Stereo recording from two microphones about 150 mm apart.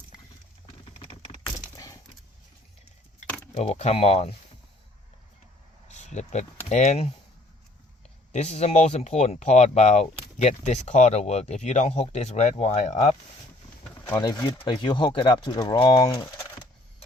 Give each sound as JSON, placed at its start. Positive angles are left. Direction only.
{"t": 1.7, "sound": "keys jangling", "side_deg": 25}
{"t": 3.2, "sound": "keys jangling", "side_deg": 10}
{"t": 3.7, "sound": "speech", "side_deg": 40}
{"t": 5.9, "sound": "a sound", "side_deg": 50}
{"t": 6.7, "sound": "speech", "side_deg": 50}
{"t": 8.3, "sound": "speech", "side_deg": 45}
{"t": 14.2, "sound": "speech", "side_deg": 25}